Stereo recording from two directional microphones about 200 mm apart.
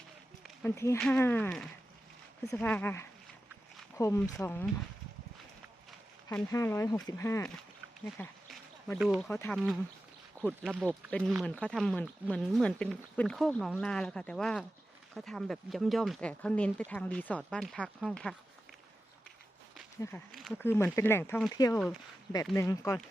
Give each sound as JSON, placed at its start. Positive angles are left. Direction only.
{"t": 0.9, "sound": "speech", "side_deg": 5}
{"t": 6.2, "sound": "speech", "side_deg": 15}
{"t": 8.4, "sound": "a sound", "side_deg": 0}
{"t": 9.3, "sound": "speech", "side_deg": 10}
{"t": 10.4, "sound": "speech", "side_deg": 0}
{"t": 20.0, "sound": "speech", "side_deg": 10}